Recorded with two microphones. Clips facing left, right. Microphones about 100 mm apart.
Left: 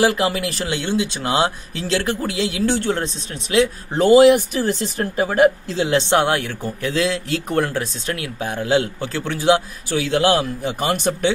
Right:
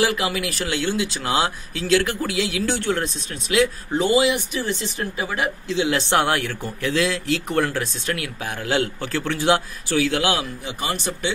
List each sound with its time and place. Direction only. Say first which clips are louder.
0.0 s speech: left 4 dB; 35° left (ahead or behind)
4.0 s speech: left 9 dB; 50° left (ahead or behind)
5.9 s speech: left 4 dB; 20° left (ahead or behind)
10.6 s speech: left 6 dB; 55° left (ahead or behind)